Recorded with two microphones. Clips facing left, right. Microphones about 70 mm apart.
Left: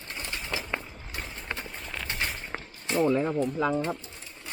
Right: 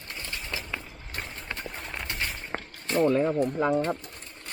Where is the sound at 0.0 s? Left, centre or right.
Left.